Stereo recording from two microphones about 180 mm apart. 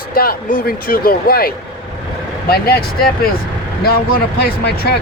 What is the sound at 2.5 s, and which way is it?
Speech, 60° left (ahead or behind).